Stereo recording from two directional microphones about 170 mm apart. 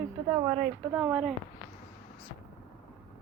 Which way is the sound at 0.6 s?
5° right (ahead or behind).